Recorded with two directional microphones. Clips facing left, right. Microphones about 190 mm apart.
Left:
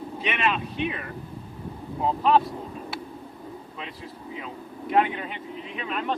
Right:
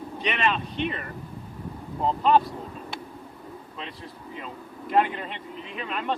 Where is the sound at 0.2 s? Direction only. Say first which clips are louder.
Even; 5° left (ahead or behind).